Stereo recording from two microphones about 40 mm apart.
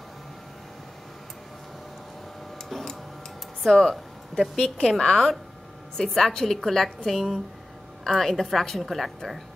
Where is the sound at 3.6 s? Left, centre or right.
Centre.